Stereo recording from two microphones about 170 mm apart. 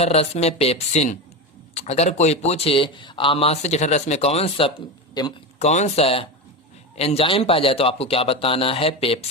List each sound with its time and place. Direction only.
0.0 s speech: 35° left (ahead or behind)
5.2 s speech: 25° left (ahead or behind)
5.5 s speech: 40° left (ahead or behind)